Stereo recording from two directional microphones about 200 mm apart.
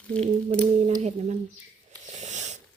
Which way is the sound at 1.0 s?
35° right (ahead or behind).